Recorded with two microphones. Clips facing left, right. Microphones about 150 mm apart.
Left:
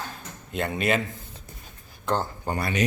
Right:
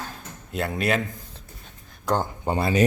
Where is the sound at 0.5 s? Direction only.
Centre (ahead or behind).